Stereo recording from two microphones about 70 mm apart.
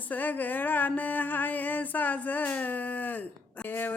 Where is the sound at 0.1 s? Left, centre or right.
Left.